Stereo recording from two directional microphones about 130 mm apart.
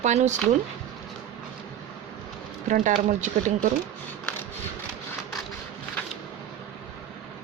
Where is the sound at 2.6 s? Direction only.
80° right.